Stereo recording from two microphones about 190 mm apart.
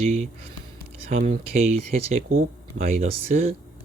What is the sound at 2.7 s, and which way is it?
Speech, 70° right (ahead or behind).